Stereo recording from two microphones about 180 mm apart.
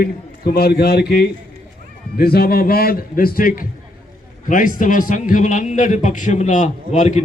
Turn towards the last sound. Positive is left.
turn(degrees=40)  # may be behind; listen again after turning